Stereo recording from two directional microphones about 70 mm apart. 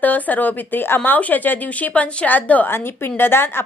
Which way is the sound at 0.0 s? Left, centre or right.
Left.